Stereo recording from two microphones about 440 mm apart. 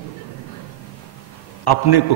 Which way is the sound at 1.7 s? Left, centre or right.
Left.